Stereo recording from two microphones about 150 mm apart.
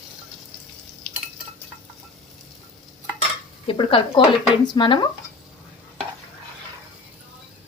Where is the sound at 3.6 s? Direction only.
35° left (ahead or behind).